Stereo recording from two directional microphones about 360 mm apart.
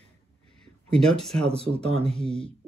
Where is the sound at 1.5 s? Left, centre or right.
Centre.